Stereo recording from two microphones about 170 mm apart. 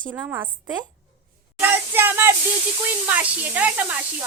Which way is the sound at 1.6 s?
10° right (ahead or behind).